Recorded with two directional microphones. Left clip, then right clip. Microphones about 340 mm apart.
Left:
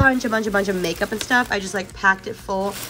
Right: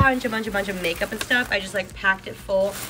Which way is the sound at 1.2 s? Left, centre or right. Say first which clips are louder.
Left 2 dB; centre.